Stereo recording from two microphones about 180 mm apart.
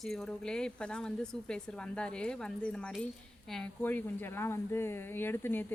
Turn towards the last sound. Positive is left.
turn(degrees=10)  # may be behind; listen again after turning